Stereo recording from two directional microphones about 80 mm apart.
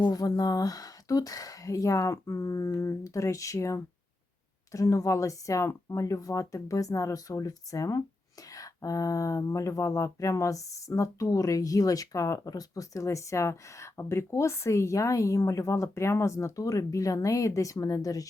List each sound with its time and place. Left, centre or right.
0.1 s speech: left